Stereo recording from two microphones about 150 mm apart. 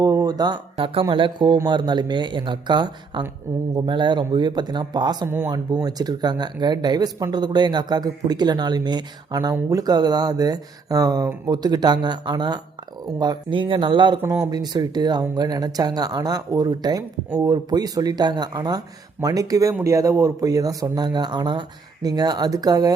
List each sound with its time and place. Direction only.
0.0 s speech: 25° right (ahead or behind)